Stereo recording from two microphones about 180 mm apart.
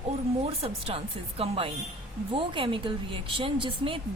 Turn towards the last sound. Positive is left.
turn(degrees=-30)  # may be behind; listen again after turning